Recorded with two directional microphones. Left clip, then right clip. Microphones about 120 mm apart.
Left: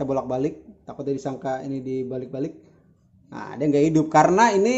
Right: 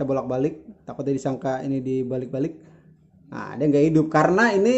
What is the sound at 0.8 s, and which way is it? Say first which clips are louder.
Speech: right 2 dB; 30° right (ahead or behind).